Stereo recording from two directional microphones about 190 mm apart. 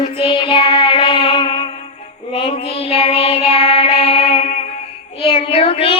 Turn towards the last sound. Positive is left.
turn(degrees=30)  # may be behind; listen again after turning